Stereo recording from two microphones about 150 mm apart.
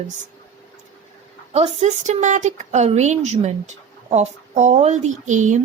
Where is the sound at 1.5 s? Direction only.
45° right (ahead or behind).